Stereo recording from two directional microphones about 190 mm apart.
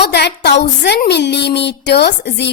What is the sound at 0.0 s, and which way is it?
A woman's voice, 60° left (ahead or behind).